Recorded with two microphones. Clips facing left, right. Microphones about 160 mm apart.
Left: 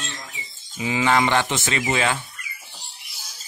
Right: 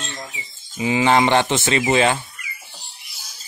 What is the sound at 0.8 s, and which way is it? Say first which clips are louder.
Speech: right 4 dB; 25° right (ahead or behind).